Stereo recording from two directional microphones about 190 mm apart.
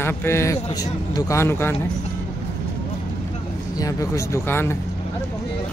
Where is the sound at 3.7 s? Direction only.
20° left (ahead or behind).